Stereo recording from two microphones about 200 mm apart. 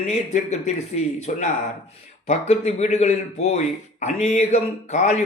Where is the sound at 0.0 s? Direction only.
35° left (ahead or behind).